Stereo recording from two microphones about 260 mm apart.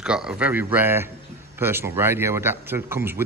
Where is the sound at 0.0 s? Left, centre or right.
Centre.